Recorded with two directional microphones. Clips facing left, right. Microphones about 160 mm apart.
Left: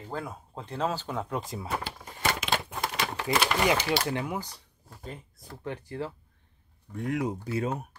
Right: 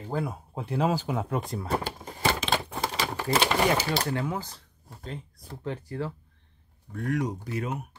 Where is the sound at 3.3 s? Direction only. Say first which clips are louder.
Right 2 dB; 25° right (ahead or behind).